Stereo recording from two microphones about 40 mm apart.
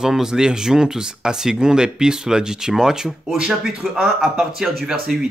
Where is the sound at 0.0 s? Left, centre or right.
Centre.